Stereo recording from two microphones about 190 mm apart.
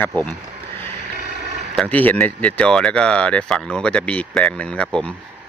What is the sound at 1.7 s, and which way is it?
Speech, 10° left (ahead or behind).